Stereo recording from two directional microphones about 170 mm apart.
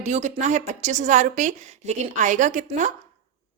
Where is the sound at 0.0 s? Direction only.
45° right (ahead or behind).